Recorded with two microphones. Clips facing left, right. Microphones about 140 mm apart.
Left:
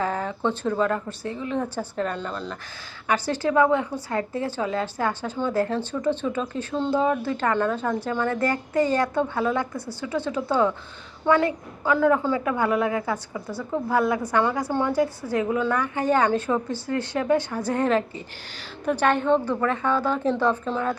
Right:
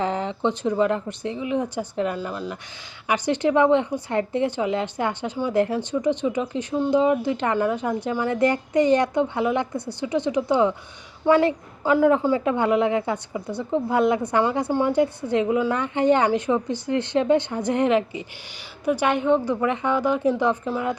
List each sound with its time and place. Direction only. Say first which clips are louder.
0.0 s a woman's voice: right 2 dB; 20° right (ahead or behind)